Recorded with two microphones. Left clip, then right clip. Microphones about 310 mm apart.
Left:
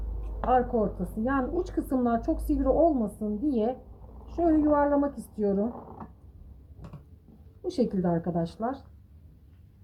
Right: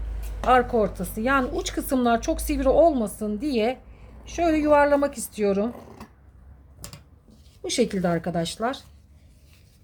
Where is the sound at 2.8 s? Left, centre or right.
Right.